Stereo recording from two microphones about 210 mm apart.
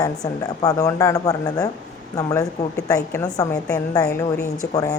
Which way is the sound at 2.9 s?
15° left (ahead or behind).